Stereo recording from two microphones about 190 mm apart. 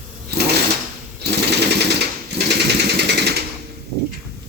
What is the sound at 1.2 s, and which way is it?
Sewing machine, 60° right (ahead or behind).